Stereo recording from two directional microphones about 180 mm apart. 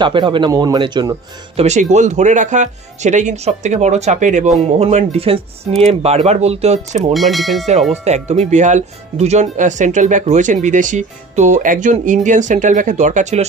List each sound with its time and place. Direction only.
0.0 s a man's voice: 25° right (ahead or behind)
1.6 s speech: 40° right (ahead or behind)
7.2 s speech: centre (ahead or behind)
7.9 s speech: 40° right (ahead or behind)